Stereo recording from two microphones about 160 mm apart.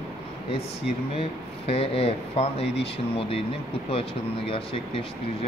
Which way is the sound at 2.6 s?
90° left.